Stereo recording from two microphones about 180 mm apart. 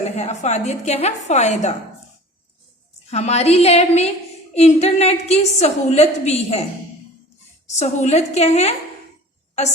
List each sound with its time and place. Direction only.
0.0 s a woman's voice: 40° left (ahead or behind)
3.1 s a woman's voice: 35° left (ahead or behind)
7.7 s a woman's voice: 40° left (ahead or behind)